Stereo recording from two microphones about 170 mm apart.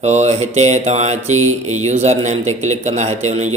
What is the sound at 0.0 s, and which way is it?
A man's voice, 40° right (ahead or behind).